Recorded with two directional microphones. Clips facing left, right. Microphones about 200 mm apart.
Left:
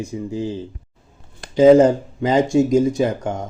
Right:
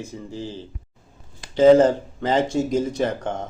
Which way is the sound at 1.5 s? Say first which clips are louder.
Left 3 dB; 10° left (ahead or behind).